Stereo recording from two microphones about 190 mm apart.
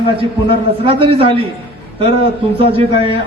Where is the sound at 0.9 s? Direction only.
30° right (ahead or behind).